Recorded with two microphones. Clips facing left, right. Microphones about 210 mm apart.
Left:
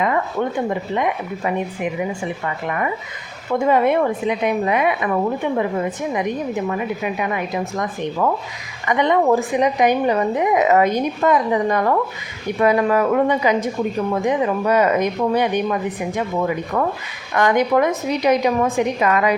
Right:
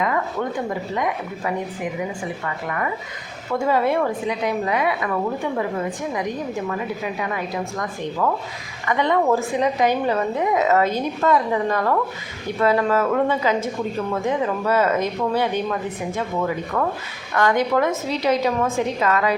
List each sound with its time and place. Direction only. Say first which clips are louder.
2.6 s a woman's voice: left 3 dB; 20° left (ahead or behind)
6.1 s a woman's voice: left 3 dB; 20° left (ahead or behind)
17.3 s a woman's voice: left 3 dB; 15° left (ahead or behind)